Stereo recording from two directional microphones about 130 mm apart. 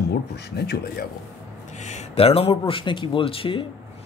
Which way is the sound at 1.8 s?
65° left (ahead or behind).